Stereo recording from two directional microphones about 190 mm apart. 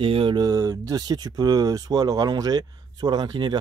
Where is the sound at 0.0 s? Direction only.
30° right (ahead or behind).